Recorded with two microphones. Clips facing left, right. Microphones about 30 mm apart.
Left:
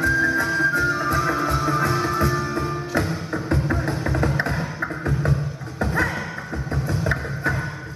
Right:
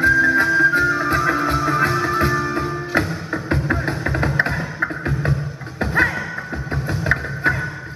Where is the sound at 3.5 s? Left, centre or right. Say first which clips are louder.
Right 3 dB; right.